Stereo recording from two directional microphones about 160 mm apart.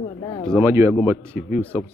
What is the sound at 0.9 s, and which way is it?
Speech, centre (ahead or behind).